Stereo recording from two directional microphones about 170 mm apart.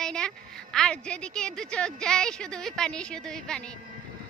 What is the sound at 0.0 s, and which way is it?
A woman's voice, 5° left (ahead or behind).